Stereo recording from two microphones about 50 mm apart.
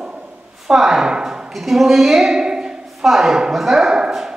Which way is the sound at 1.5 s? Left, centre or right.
Centre.